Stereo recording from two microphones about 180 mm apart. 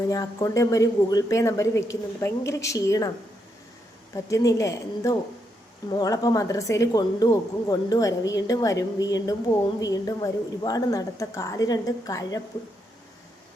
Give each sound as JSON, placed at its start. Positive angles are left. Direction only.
{"t": 0.1, "sound": "a woman's voice", "side_deg": 20}
{"t": 4.1, "sound": "a woman's voice", "side_deg": 15}